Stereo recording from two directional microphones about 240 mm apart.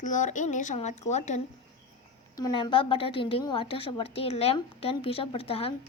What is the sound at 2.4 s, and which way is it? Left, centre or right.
A woman's voice, centre.